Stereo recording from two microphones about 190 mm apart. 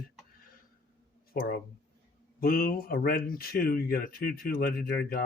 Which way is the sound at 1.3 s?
50° left (ahead or behind).